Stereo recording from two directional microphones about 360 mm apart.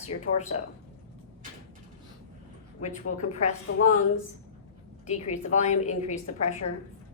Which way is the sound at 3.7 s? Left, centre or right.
Left.